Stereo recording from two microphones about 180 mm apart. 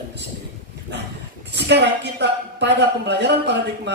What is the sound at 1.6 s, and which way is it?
A woman's voice, 70° right (ahead or behind).